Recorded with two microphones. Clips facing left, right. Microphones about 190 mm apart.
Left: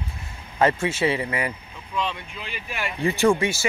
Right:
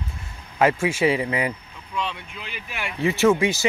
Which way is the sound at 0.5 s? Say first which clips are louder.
Right 1 dB; 10° right (ahead or behind).